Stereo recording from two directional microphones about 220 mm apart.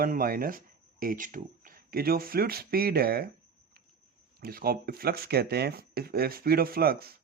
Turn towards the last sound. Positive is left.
turn(degrees=-45)  # may be behind; listen again after turning